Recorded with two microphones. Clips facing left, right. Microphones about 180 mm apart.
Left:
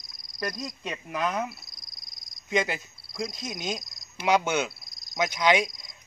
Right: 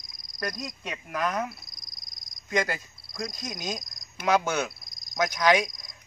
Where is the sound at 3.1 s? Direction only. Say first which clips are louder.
Left 2 dB; 5° left (ahead or behind).